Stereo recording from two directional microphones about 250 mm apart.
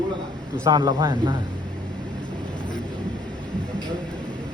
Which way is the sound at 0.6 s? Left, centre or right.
Centre.